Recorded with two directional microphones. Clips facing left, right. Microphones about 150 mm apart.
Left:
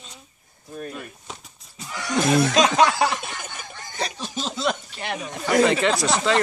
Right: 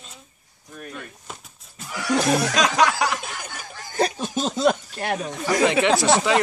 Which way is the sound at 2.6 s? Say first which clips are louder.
Left 2 dB; 30° left (ahead or behind).